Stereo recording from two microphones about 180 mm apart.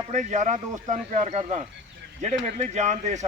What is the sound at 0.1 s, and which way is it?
Speech, 40° right (ahead or behind).